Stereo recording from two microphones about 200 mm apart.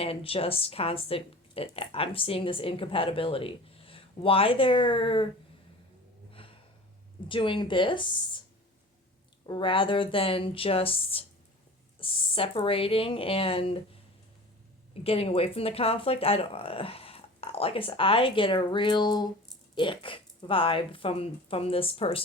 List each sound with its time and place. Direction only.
0.0 s speech: 30° left (ahead or behind)
7.3 s speech: 25° left (ahead or behind)
9.5 s speech: 25° left (ahead or behind)
15.0 s speech: 30° left (ahead or behind)